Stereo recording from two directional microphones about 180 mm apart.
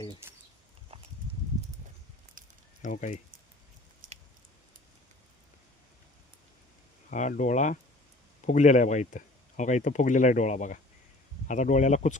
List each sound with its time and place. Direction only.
0.2 s a sound: 15° right (ahead or behind)
2.4 s snake: 50° right (ahead or behind)
2.8 s speech: 40° left (ahead or behind)
4.0 s squish: 50° right (ahead or behind)
7.1 s speech: 45° left (ahead or behind)